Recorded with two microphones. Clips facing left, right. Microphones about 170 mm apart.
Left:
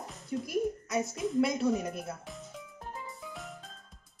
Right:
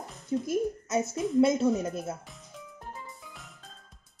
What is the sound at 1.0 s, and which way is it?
Speech, centre (ahead or behind).